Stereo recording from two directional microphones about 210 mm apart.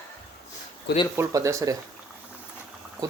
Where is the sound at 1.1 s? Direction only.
15° right (ahead or behind).